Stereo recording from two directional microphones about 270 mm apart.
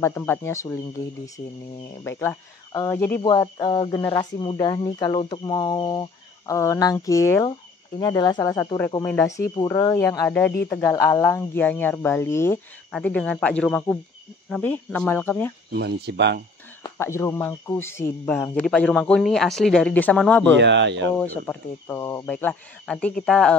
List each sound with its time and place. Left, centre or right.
0.0 s speech: centre
15.7 s speech: right
16.8 s speech: centre
20.5 s speech: right
21.2 s speech: centre